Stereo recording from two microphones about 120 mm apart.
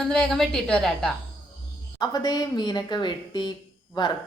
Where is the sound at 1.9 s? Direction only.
35° left (ahead or behind).